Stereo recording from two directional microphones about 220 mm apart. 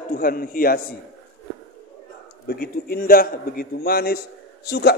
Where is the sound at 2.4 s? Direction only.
45° left (ahead or behind).